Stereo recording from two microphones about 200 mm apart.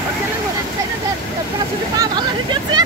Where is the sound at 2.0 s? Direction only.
20° right (ahead or behind).